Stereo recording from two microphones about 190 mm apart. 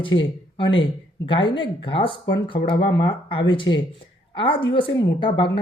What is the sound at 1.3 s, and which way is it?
Speech, 25° left (ahead or behind).